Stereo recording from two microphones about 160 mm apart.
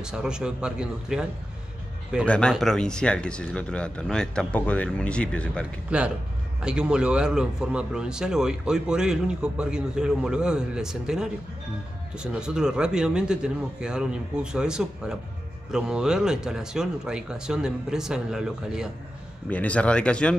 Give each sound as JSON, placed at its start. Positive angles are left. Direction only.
{"t": 0.0, "sound": "a man's voice", "side_deg": -5}
{"t": 2.2, "sound": "speech", "side_deg": 5}
{"t": 5.9, "sound": "a man's voice", "side_deg": -5}
{"t": 19.5, "sound": "speech", "side_deg": 10}